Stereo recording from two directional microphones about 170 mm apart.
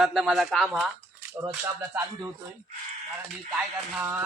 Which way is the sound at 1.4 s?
15° right (ahead or behind).